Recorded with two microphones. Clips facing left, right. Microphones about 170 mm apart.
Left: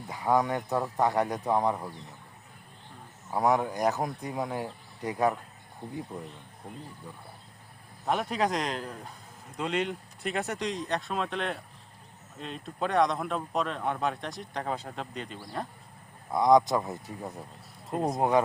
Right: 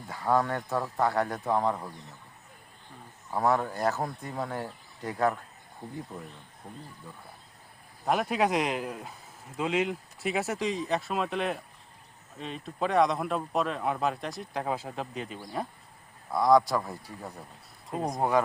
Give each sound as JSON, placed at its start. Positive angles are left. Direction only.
{"t": 0.1, "sound": "speech", "side_deg": 15}
{"t": 3.3, "sound": "speech", "side_deg": 15}
{"t": 5.8, "sound": "speech", "side_deg": -5}
{"t": 8.0, "sound": "speech", "side_deg": -5}
{"t": 16.3, "sound": "speech", "side_deg": 20}